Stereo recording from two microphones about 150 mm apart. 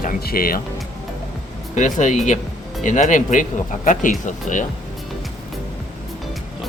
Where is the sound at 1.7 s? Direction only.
55° left (ahead or behind).